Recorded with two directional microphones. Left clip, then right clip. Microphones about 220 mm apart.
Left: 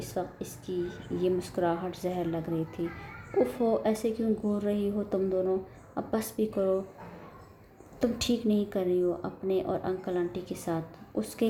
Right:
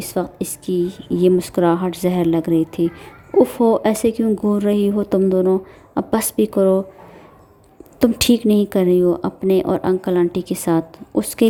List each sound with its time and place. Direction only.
0.0 s a woman's voice: 45° right (ahead or behind)
7.9 s speech: 45° right (ahead or behind)